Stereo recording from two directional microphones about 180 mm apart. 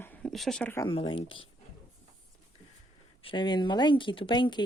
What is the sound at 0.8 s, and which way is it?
Speech, 30° left (ahead or behind).